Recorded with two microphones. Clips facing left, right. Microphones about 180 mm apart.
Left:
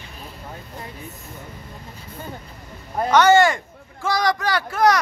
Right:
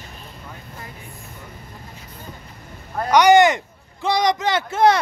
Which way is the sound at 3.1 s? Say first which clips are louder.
Right 2 dB; 15° right (ahead or behind).